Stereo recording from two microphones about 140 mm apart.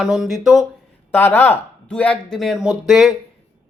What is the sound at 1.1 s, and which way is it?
Speech, 15° left (ahead or behind).